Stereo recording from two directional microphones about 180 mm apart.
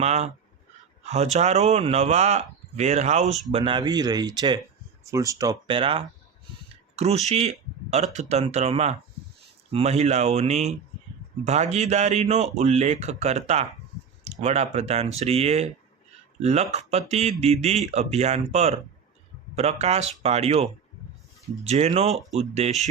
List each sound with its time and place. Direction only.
0.0 s speech: 40° right (ahead or behind)